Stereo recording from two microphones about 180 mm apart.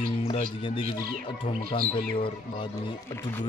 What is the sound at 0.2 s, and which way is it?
Speech, 30° left (ahead or behind).